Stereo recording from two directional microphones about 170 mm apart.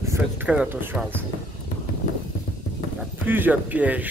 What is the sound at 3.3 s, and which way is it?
Speech, 10° right (ahead or behind).